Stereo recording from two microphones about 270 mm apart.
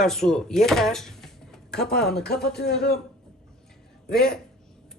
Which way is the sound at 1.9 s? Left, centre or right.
Left.